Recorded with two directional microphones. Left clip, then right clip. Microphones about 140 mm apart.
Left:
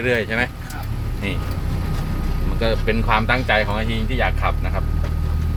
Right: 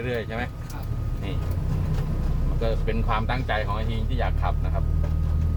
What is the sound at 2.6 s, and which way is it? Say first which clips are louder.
Speech: left 8 dB; 20° left (ahead or behind).